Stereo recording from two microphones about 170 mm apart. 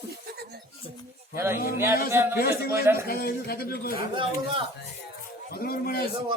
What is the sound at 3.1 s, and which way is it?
Speech, 65° left (ahead or behind).